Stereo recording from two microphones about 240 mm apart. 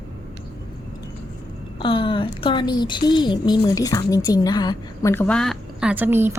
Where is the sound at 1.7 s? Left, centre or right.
Left; by 6.4 s centre.